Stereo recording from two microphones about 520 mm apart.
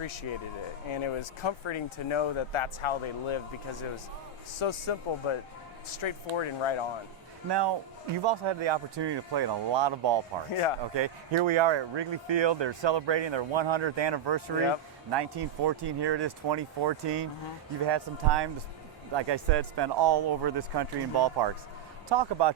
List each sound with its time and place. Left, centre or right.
0.0 s speech: left
8.2 s a man's voice: right